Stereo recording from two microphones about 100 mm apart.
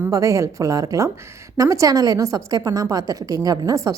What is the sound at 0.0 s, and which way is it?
A woman's voice, 30° right (ahead or behind).